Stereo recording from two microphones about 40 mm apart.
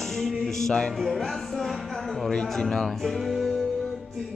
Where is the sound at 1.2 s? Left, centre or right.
Centre.